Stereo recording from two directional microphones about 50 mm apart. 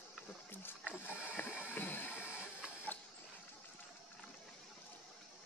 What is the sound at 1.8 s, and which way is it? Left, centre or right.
Music, left.